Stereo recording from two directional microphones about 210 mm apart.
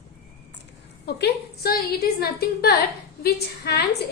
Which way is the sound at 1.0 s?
50° left (ahead or behind).